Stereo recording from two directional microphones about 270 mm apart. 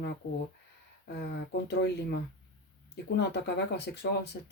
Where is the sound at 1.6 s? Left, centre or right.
Left.